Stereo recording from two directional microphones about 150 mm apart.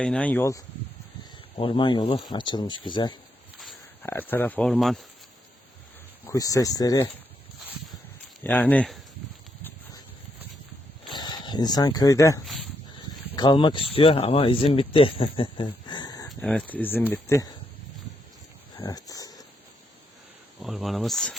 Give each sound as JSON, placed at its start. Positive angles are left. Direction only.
{"t": 0.0, "sound": "speech", "side_deg": 5}
{"t": 1.5, "sound": "speech", "side_deg": 35}
{"t": 4.0, "sound": "speech", "side_deg": 15}
{"t": 6.2, "sound": "speech", "side_deg": 20}
{"t": 8.4, "sound": "speech", "side_deg": 10}
{"t": 11.1, "sound": "speech", "side_deg": 30}
{"t": 16.3, "sound": "speech", "side_deg": 5}
{"t": 18.8, "sound": "a sound", "side_deg": 25}
{"t": 20.6, "sound": "speech", "side_deg": 0}